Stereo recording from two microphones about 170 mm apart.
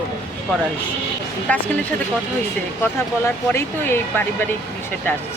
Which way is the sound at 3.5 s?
15° left (ahead or behind).